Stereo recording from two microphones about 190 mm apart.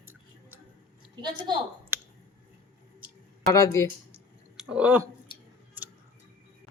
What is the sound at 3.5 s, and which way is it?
Speech, 15° left (ahead or behind).